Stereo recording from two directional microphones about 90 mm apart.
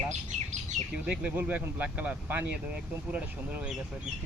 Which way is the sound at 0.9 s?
10° right (ahead or behind).